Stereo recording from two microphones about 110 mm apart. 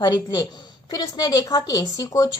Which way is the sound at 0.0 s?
40° left (ahead or behind).